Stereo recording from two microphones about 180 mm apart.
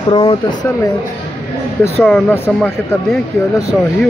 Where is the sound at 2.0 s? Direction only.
10° left (ahead or behind).